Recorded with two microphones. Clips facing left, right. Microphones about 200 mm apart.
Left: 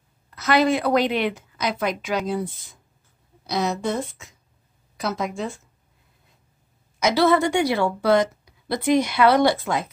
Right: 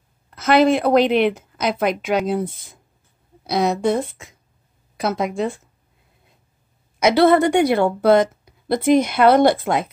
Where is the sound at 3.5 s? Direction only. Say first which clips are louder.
Right 5 dB; 55° right (ahead or behind).